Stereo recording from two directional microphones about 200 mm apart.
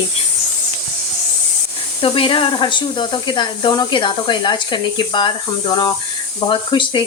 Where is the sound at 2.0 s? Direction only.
25° left (ahead or behind).